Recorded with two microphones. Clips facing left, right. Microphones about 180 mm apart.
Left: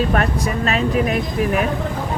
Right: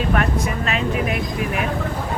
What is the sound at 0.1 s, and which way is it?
Speech, 40° left (ahead or behind).